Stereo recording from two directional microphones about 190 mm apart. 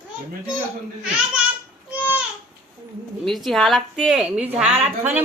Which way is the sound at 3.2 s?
Centre (ahead or behind).